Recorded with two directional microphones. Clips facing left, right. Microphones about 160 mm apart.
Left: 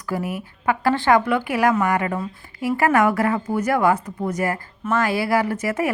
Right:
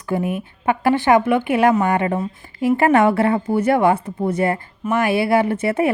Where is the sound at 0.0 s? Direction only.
25° right (ahead or behind).